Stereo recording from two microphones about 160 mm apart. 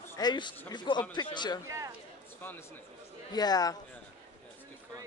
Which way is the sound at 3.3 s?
25° left (ahead or behind).